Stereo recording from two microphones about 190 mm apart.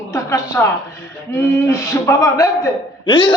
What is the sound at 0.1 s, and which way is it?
A woman's voice, 15° left (ahead or behind).